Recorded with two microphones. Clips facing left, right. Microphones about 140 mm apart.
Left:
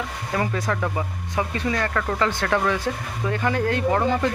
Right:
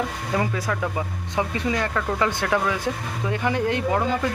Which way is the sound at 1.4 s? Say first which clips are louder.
Even; 15° right (ahead or behind).